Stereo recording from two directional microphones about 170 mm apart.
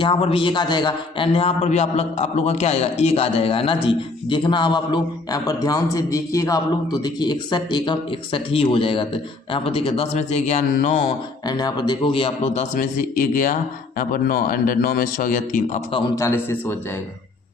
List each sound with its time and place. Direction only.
0.0 s a man's voice: 30° left (ahead or behind)
11.4 s a man's voice: 25° left (ahead or behind); by 15.8 s 55° left (ahead or behind)
16.1 s a man's voice: 15° left (ahead or behind)